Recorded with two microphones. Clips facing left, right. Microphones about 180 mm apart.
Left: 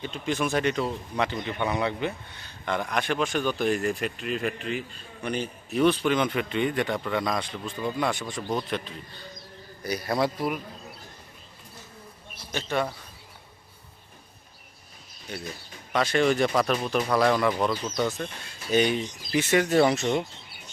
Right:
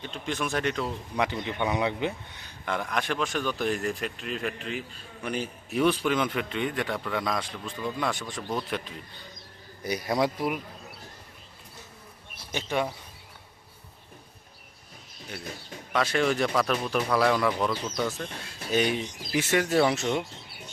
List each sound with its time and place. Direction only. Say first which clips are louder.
0.0 s speech: left 4 dB; 5° left (ahead or behind)
1.1 s speech: right 3 dB; 15° right (ahead or behind)
2.6 s speech: left 2 dB; centre (ahead or behind)
9.8 s speech: even; 15° right (ahead or behind)
12.5 s speech: left 1 dB; 15° right (ahead or behind)
15.3 s speech: left 2 dB; 5° right (ahead or behind)
17.9 s speech: left 2 dB; centre (ahead or behind)